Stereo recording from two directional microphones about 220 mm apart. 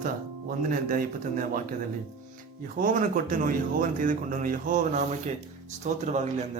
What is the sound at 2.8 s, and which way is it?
Speech, 35° right (ahead or behind).